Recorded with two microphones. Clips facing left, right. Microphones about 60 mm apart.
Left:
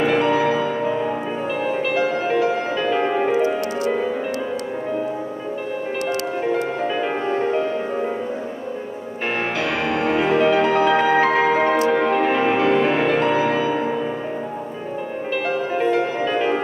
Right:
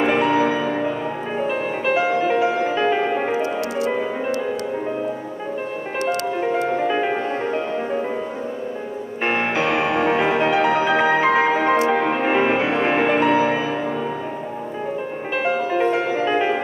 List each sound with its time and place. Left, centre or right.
0.0 s music: centre
6.0 s music: centre
9.2 s music: right
15.9 s music: centre